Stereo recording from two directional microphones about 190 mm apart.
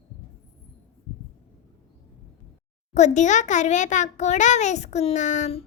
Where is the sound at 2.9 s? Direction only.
40° left (ahead or behind).